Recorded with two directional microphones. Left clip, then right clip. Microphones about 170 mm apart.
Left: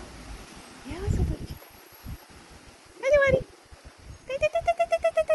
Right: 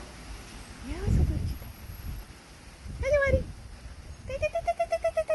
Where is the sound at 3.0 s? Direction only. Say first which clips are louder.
Left 4 dB; 5° left (ahead or behind).